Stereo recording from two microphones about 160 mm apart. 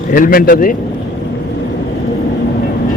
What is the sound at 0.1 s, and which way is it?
Speech, 65° left (ahead or behind).